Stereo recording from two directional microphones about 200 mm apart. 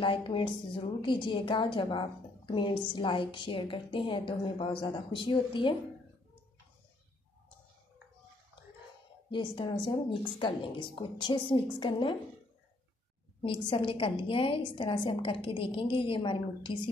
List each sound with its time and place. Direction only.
0.0 s a woman's voice: 25° left (ahead or behind)
9.3 s a woman's voice: 25° left (ahead or behind)
13.4 s a woman's voice: 25° left (ahead or behind)